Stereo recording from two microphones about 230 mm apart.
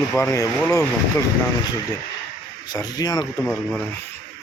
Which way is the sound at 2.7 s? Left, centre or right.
Centre.